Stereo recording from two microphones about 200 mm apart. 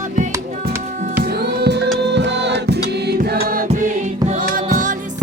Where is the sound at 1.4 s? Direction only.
55° right (ahead or behind).